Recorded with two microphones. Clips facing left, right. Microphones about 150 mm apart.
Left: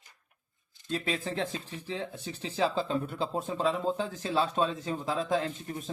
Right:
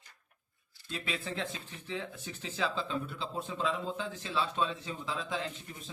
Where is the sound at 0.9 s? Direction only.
40° left (ahead or behind).